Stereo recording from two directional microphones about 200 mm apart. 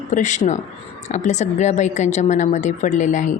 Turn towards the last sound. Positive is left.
turn(degrees=40)  # may be behind; listen again after turning